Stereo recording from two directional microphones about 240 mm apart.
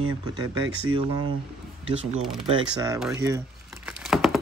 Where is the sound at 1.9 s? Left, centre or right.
Right.